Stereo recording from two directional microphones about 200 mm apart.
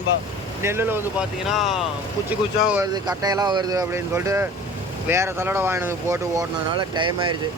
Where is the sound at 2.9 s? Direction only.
20° right (ahead or behind).